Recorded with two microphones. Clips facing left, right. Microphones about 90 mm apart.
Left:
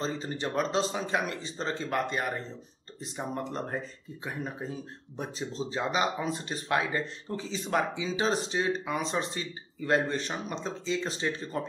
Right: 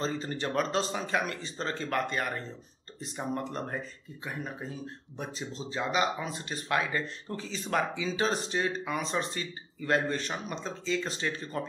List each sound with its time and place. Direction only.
0.4 s speech: centre (ahead or behind)
0.7 s speech: 25° left (ahead or behind)